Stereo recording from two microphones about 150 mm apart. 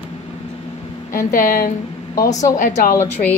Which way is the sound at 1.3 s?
70° left (ahead or behind).